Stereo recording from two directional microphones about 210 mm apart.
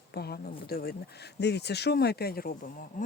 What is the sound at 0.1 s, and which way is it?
Speech, 50° left (ahead or behind).